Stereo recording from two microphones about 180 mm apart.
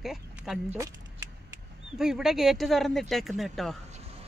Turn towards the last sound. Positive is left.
turn(degrees=0)  # may be behind; listen again after turning